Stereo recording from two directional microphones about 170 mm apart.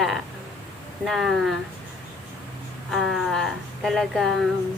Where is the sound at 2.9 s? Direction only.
Centre (ahead or behind).